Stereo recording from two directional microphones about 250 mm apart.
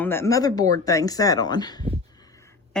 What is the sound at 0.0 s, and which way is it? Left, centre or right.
Speech, centre.